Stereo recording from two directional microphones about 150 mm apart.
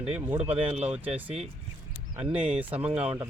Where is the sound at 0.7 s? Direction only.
45° right (ahead or behind).